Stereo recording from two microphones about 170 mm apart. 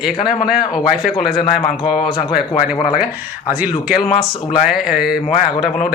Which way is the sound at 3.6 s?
5° right (ahead or behind).